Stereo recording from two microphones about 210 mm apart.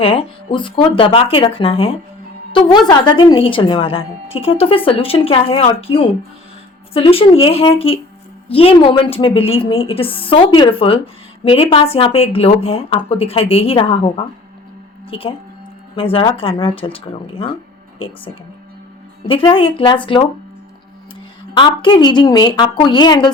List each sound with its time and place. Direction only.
0.0 s a woman's voice: 25° left (ahead or behind)
15.1 s a woman's voice: 25° left (ahead or behind)
19.2 s a woman's voice: 25° left (ahead or behind)
21.5 s a woman's voice: 25° left (ahead or behind)